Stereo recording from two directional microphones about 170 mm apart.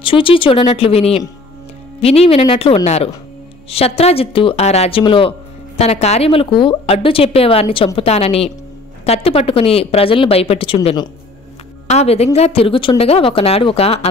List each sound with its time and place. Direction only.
0.0 s speech: 30° left (ahead or behind)